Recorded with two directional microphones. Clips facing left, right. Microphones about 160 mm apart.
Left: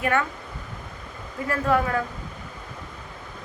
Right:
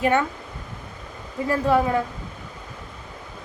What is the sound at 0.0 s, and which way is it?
Speech, 25° right (ahead or behind).